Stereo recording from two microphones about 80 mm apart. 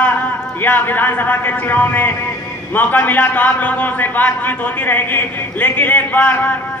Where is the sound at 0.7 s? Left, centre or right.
Left.